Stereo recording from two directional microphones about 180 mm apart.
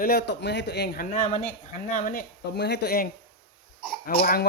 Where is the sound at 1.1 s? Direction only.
40° left (ahead or behind).